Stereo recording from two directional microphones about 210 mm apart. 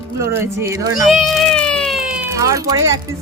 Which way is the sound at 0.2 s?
15° right (ahead or behind).